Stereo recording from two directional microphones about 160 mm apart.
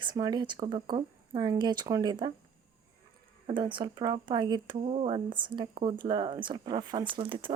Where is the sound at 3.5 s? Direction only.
30° right (ahead or behind).